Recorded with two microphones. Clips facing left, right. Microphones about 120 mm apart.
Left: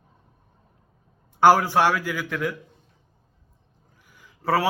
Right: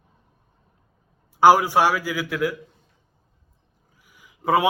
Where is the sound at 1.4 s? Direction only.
10° right (ahead or behind).